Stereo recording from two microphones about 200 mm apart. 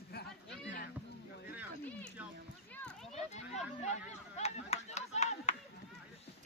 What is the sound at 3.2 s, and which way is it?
Children playing, 35° left (ahead or behind).